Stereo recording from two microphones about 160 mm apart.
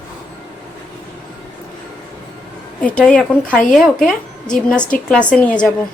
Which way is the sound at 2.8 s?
5° left (ahead or behind).